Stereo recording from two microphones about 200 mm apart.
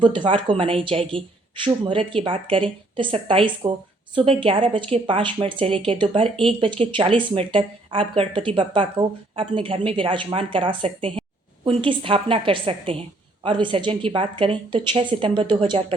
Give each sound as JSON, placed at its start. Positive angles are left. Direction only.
{"t": 0.0, "sound": "a woman's voice", "side_deg": -25}